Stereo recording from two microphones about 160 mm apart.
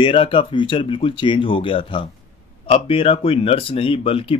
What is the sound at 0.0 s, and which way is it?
Speech, 30° left (ahead or behind).